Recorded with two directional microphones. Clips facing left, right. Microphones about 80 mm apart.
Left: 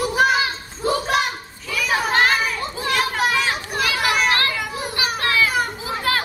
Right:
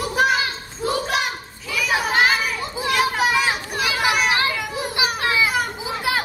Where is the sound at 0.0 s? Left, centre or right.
Centre.